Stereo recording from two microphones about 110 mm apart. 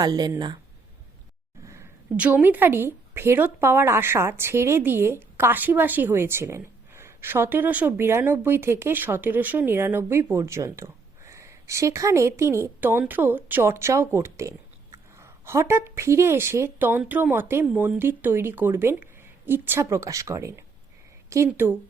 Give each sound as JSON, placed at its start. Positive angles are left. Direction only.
{"t": 0.0, "sound": "speech", "side_deg": -35}
{"t": 1.6, "sound": "a sound", "side_deg": -25}
{"t": 2.1, "sound": "a woman's voice", "side_deg": -15}